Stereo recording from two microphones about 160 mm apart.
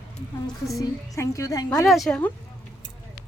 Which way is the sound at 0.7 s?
20° left (ahead or behind).